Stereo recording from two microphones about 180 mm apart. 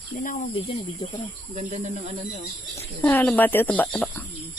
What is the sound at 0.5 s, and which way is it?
Speech, 35° left (ahead or behind).